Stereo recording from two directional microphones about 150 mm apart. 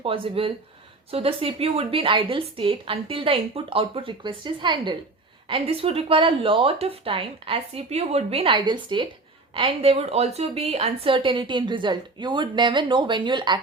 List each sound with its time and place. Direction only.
0.0 s a woman's voice: 35° right (ahead or behind)